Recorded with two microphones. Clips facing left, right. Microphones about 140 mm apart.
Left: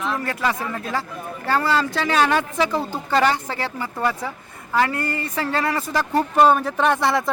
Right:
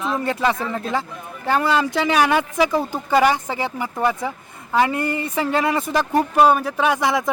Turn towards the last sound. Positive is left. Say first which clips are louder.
# even
turn(degrees=-15)  # may be behind; listen again after turning